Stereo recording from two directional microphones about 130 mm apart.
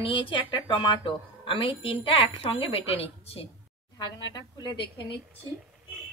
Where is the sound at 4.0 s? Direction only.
30° left (ahead or behind).